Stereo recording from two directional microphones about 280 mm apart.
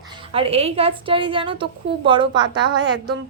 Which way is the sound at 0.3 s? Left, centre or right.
Right.